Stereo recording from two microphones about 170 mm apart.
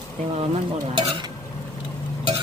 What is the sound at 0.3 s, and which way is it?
Speech, 35° right (ahead or behind).